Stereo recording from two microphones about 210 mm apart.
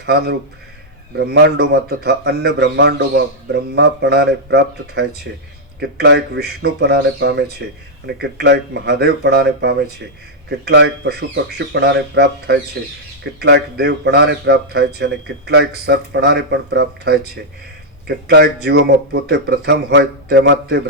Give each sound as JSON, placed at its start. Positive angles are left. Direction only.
{"t": 0.0, "sound": "a man's voice", "side_deg": -50}